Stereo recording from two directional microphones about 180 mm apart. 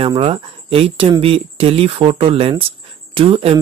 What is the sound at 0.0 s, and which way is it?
Speech, 30° right (ahead or behind).